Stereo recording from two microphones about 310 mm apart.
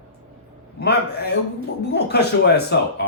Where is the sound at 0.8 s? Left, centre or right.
Left.